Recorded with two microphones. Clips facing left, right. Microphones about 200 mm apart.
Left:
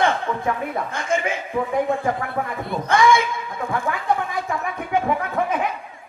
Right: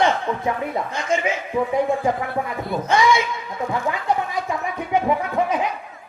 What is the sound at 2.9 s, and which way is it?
Speech, 50° left (ahead or behind).